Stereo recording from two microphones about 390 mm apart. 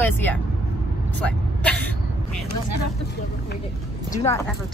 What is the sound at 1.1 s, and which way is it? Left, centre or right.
Vehicle, centre.